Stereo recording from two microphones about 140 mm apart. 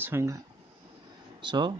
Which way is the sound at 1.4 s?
35° right (ahead or behind).